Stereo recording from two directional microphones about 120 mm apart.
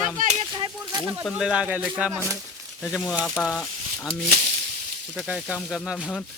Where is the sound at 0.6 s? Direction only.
35° right (ahead or behind).